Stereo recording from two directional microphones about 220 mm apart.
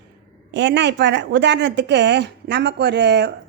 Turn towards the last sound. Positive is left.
turn(degrees=-50)  # may be behind; listen again after turning